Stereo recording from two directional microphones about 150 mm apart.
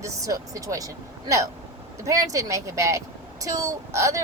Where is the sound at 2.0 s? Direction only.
25° right (ahead or behind).